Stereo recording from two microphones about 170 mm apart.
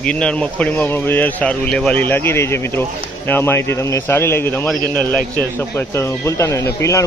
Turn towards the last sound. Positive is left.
turn(degrees=20)  # may be behind; listen again after turning